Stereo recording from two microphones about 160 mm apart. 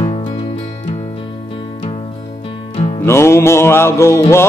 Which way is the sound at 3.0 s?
15° left (ahead or behind).